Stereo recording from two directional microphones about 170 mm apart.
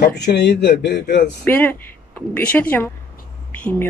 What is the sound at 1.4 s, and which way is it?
Speech, 10° left (ahead or behind).